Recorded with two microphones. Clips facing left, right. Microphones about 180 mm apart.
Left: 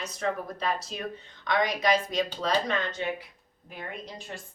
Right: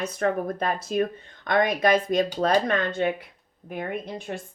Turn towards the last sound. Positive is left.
turn(degrees=-55)  # may be behind; listen again after turning